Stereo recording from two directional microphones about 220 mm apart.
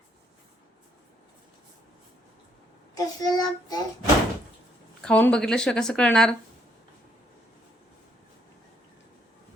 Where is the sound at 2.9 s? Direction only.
20° left (ahead or behind).